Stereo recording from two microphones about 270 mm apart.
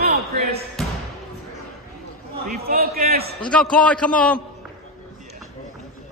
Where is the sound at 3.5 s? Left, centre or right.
Centre.